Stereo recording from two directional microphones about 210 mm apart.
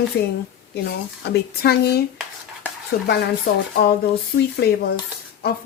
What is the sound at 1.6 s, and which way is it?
Speech, 50° left (ahead or behind).